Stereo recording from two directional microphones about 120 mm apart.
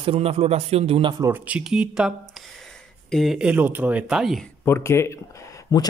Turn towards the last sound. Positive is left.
turn(degrees=30)  # may be behind; listen again after turning